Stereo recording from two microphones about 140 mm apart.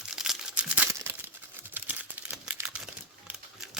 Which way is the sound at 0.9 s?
15° right (ahead or behind).